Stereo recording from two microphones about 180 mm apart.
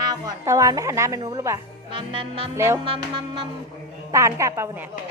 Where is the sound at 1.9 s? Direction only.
30° right (ahead or behind).